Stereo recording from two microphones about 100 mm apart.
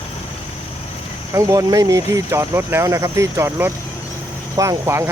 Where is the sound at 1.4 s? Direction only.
35° right (ahead or behind).